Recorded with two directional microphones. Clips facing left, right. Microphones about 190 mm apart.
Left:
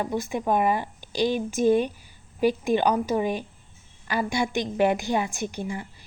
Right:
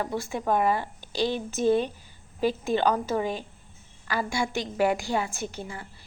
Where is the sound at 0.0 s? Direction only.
20° left (ahead or behind).